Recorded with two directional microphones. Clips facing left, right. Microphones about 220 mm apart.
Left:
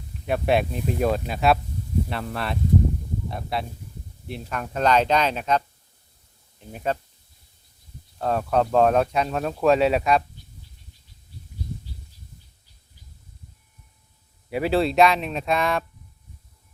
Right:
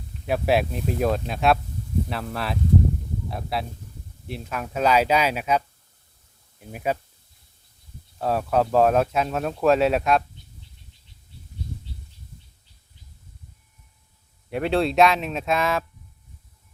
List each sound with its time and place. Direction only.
0.3 s speech: centre (ahead or behind)
8.2 s speech: 5° right (ahead or behind)
14.5 s speech: 5° left (ahead or behind)